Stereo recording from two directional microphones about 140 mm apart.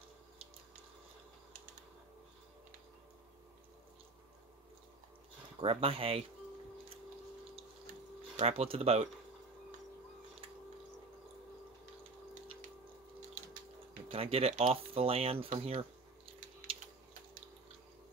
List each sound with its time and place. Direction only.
5.6 s speech: 40° right (ahead or behind)
8.4 s speech: 45° right (ahead or behind)
14.1 s speech: 45° right (ahead or behind)